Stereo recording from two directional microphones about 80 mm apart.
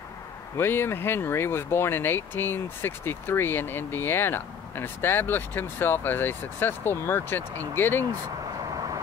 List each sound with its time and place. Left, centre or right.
0.6 s speech: left